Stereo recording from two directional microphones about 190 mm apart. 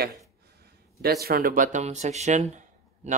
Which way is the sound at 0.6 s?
55° right (ahead or behind).